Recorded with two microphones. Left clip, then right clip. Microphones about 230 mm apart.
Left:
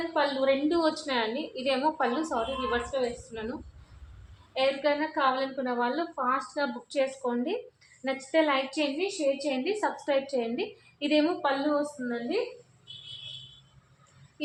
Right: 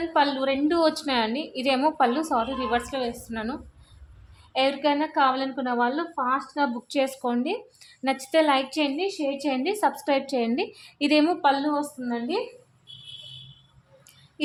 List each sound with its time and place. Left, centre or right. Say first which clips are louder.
0.1 s a woman's voice: right 3 dB; right
4.5 s a woman's voice: right 3 dB; right